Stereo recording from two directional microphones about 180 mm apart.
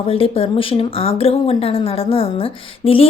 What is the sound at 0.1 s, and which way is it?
Speech, 30° left (ahead or behind).